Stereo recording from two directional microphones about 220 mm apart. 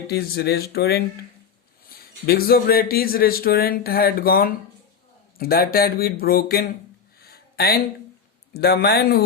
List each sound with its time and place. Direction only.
0.1 s speech: 45° left (ahead or behind)
7.2 s a sound: 45° left (ahead or behind)
8.5 s speech: 45° left (ahead or behind)